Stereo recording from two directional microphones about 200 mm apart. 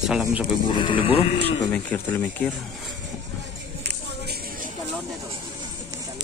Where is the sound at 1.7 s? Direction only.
10° left (ahead or behind).